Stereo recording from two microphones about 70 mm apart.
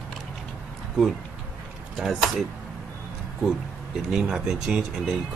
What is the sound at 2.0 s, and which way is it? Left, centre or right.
Speech, centre.